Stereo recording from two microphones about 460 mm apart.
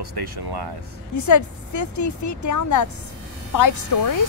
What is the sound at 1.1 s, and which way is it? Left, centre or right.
Speech, left.